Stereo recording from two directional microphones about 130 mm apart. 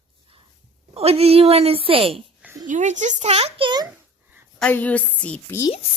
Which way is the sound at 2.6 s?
70° right (ahead or behind).